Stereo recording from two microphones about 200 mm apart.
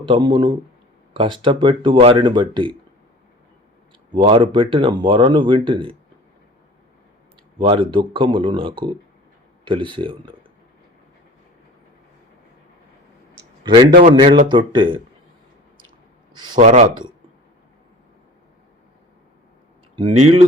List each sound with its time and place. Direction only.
0.1 s speech: 25° right (ahead or behind)
4.1 s speech: 25° right (ahead or behind)
7.6 s speech: 25° right (ahead or behind)
14.2 s speech: 25° right (ahead or behind)
16.6 s speech: 35° right (ahead or behind)
20.0 s speech: 25° right (ahead or behind)